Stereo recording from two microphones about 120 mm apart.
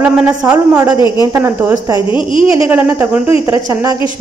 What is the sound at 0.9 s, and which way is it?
Speech, 40° left (ahead or behind).